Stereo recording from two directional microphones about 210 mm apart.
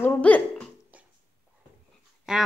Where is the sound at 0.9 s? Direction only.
5° right (ahead or behind).